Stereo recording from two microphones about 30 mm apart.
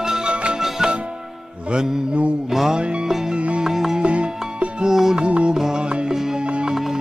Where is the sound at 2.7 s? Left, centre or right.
Right.